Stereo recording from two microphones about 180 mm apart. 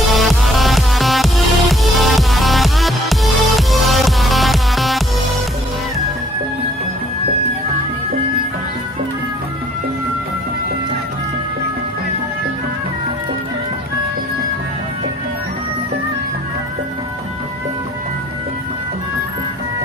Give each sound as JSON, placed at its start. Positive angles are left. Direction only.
{"t": 0.1, "sound": "music", "side_deg": 0}